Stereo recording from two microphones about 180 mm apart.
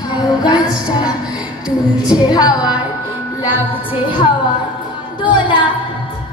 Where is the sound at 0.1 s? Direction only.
25° left (ahead or behind).